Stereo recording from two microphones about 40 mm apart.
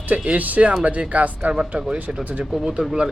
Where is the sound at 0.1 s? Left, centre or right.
Right.